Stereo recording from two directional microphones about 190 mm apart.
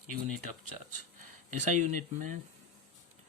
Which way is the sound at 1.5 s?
40° right (ahead or behind).